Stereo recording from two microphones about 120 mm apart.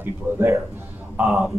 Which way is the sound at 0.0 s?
20° right (ahead or behind).